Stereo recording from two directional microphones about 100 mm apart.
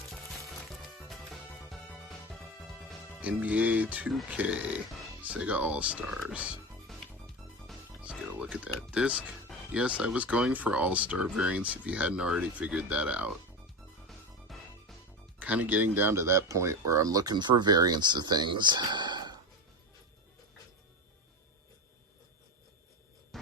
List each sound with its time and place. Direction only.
0.9 s music: centre (ahead or behind)
3.2 s speech: 15° right (ahead or behind)
8.0 s music: 10° right (ahead or behind)
9.7 s speech: 10° right (ahead or behind)
14.1 s music: centre (ahead or behind)
15.4 s speech: 15° right (ahead or behind); by 19.4 s 45° right (ahead or behind)
23.3 s a sound: centre (ahead or behind)